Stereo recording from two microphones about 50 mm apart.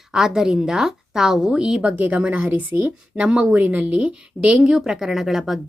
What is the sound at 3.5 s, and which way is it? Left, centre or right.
A woman's voice, right.